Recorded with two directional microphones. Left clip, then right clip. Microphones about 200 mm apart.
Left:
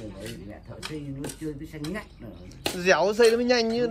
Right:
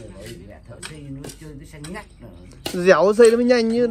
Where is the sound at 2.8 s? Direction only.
20° right (ahead or behind).